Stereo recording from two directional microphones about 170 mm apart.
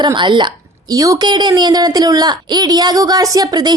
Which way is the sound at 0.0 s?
25° right (ahead or behind).